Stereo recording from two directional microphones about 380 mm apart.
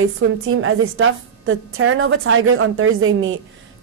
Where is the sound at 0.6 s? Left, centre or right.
Right.